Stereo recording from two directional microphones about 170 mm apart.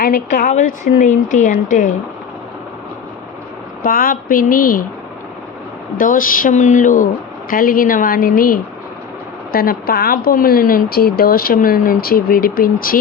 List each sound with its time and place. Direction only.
0.0 s speech: 50° left (ahead or behind)
3.8 s speech: 55° left (ahead or behind)
6.0 s speech: 55° left (ahead or behind)